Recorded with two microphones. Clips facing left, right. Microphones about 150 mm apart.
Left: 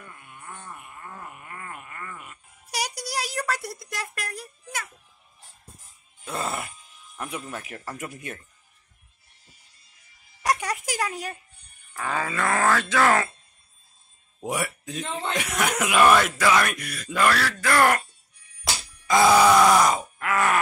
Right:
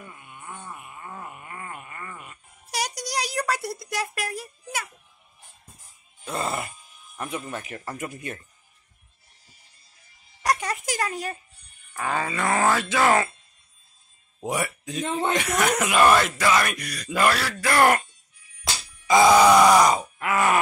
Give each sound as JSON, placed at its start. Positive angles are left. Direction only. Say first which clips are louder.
{"t": 0.0, "sound": "groan", "louder": "right 2 dB", "side_deg": -15}
{"t": 2.7, "sound": "a sound", "louder": "right 1 dB", "side_deg": 10}
{"t": 6.2, "sound": "music", "louder": "right 2 dB", "side_deg": 0}
{"t": 7.3, "sound": "speech", "louder": "right 4 dB", "side_deg": 0}
{"t": 10.4, "sound": "a sound", "louder": "even", "side_deg": 15}
{"t": 11.9, "sound": "speech", "louder": "right 1 dB", "side_deg": 0}
{"t": 12.4, "sound": "speech", "louder": "right 1 dB", "side_deg": -20}
{"t": 14.5, "sound": "speech", "louder": "right 1 dB", "side_deg": 5}
{"t": 17.3, "sound": "speech", "louder": "left 1 dB", "side_deg": -20}
{"t": 18.6, "sound": "groan", "louder": "left 1 dB", "side_deg": 0}